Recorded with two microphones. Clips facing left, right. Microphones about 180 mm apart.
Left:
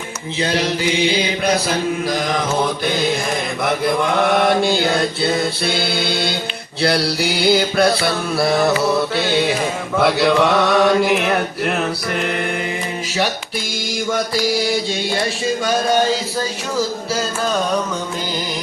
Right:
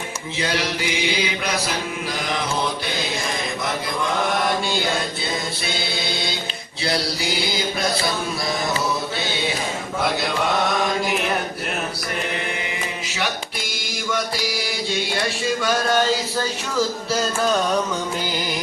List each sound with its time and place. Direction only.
3.6 s mantra: 60° left (ahead or behind)
6.8 s music: 65° left (ahead or behind)
7.5 s mantra: 65° left (ahead or behind)
10.0 s mantra: 65° left (ahead or behind)